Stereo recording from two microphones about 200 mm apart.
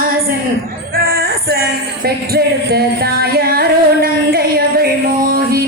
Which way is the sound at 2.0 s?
50° right (ahead or behind).